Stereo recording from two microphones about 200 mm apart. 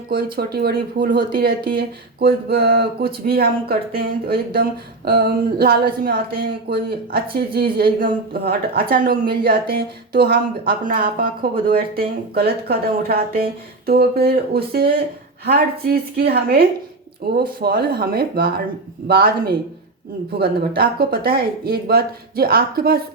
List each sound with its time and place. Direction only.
0.1 s speech: 50° right (ahead or behind)